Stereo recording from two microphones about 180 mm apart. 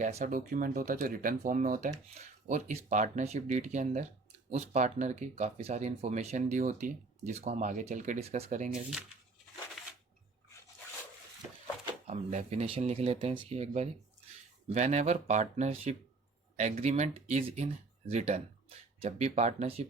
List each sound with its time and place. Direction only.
0.0 s speech: 40° right (ahead or behind)
9.8 s a sound: centre (ahead or behind)
12.0 s speech: 40° right (ahead or behind)